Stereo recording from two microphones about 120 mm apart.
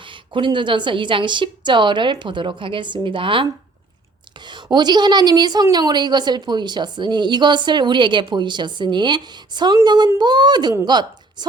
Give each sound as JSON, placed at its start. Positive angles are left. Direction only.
{"t": 0.0, "sound": "a woman's voice", "side_deg": -45}